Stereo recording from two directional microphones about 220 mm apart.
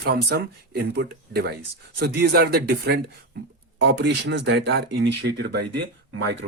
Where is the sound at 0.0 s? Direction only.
50° right (ahead or behind).